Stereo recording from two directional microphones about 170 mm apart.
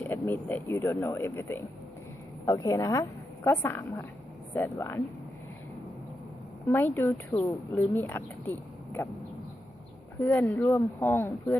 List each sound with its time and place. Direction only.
0.1 s a woman's voice: 10° left (ahead or behind)
6.7 s a woman's voice: 10° left (ahead or behind)
10.2 s a woman's voice: 10° left (ahead or behind)